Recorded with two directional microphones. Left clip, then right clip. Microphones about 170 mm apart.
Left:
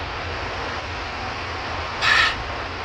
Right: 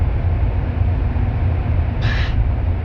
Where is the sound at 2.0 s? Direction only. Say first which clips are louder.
Left 11 dB; 30° left (ahead or behind).